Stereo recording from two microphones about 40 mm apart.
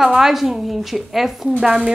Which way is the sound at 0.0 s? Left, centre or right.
Centre.